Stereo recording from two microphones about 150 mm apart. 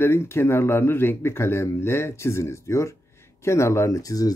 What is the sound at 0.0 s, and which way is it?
Speech, 15° left (ahead or behind).